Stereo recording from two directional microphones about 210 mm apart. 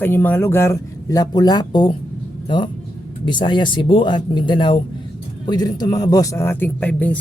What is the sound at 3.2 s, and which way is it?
Speech, 20° left (ahead or behind).